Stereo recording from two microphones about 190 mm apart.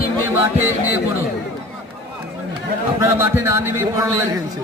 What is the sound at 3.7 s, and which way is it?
Speech, 15° right (ahead or behind).